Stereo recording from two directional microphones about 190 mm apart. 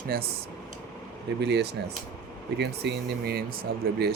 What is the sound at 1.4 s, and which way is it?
Speech, 60° right (ahead or behind).